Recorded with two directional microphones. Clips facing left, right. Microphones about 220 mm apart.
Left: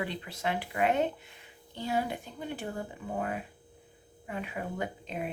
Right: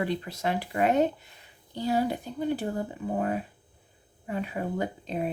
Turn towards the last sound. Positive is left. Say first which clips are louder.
# right 5 dB
turn(degrees=-35)  # may be behind; listen again after turning